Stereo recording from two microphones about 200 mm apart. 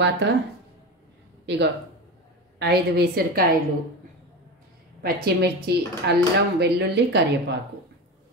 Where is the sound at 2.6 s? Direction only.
55° right (ahead or behind).